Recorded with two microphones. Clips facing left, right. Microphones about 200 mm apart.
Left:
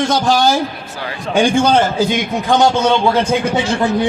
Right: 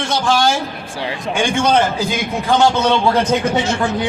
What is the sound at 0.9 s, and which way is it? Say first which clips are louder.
Speech: right 1 dB; 25° right (ahead or behind).